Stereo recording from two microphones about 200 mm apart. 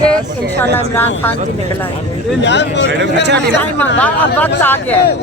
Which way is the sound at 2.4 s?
60° left (ahead or behind).